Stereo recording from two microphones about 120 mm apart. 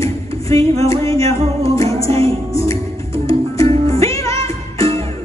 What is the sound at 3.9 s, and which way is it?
Music, 25° left (ahead or behind).